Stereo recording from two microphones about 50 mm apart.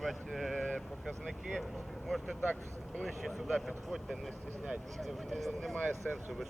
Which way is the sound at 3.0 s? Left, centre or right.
Centre.